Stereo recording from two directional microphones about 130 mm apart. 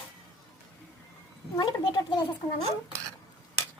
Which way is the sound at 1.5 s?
35° left (ahead or behind).